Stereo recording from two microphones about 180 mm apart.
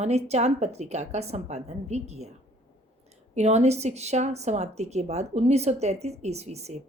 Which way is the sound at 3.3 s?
40° right (ahead or behind).